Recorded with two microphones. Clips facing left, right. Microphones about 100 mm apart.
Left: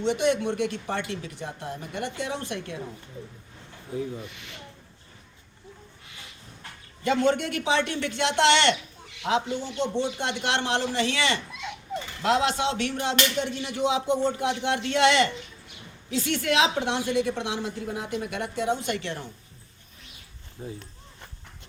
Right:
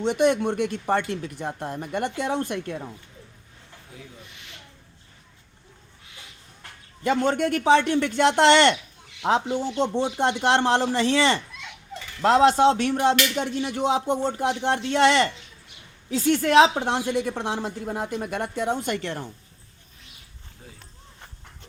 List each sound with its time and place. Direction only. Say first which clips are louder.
0.0 s a woman's voice: right 3 dB; 50° right (ahead or behind)
3.9 s speech: left 14 dB; 30° left (ahead or behind)
7.0 s a woman's voice: right 1 dB; 45° right (ahead or behind)
9.7 s a woman's voice: right 1 dB; 40° right (ahead or behind)
20.6 s speech: left 11 dB; 25° left (ahead or behind)